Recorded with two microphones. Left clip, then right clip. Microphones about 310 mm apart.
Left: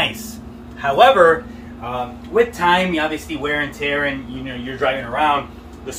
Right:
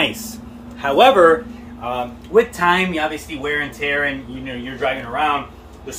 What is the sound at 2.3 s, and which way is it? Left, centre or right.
Speech, right.